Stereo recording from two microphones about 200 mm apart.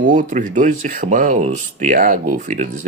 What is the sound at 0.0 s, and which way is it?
Speech, 40° right (ahead or behind).